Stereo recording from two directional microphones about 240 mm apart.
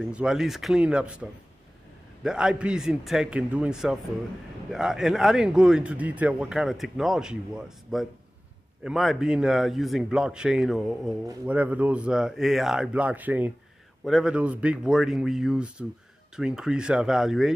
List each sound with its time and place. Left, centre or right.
0.0 s a man's voice: centre
2.2 s a man's voice: centre